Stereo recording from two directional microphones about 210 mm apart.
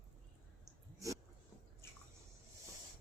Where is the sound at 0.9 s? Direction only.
15° right (ahead or behind).